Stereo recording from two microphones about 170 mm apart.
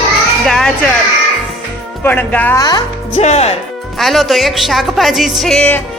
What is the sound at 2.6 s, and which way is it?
Speech, 25° left (ahead or behind).